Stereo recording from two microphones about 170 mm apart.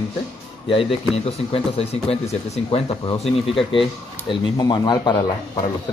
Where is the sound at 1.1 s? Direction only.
35° left (ahead or behind).